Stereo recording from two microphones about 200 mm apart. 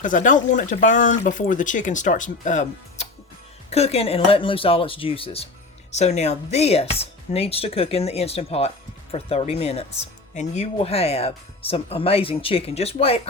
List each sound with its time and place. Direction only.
0.0 s speech: 40° left (ahead or behind)